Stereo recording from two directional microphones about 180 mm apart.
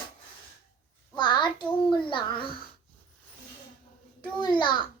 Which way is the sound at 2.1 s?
25° left (ahead or behind).